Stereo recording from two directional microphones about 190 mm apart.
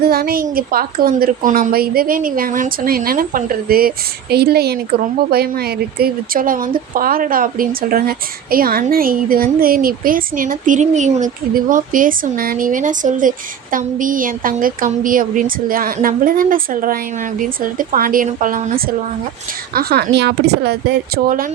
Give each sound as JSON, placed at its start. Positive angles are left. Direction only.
{"t": 0.0, "sound": "a woman's voice", "side_deg": -55}
{"t": 19.7, "sound": "speech", "side_deg": -55}